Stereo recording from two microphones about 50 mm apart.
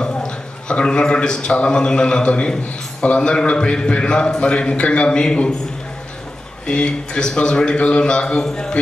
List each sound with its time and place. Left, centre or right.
0.0 s a man's voice: centre
6.7 s a man's voice: centre